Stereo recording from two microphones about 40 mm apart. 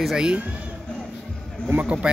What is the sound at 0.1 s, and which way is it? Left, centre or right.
Speech, right.